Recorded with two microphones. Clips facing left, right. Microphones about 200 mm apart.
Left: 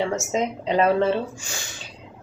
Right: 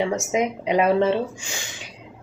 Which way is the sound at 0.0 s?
15° right (ahead or behind).